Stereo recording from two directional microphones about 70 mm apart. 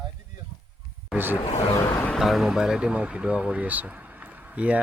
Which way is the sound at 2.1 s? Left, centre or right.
Centre.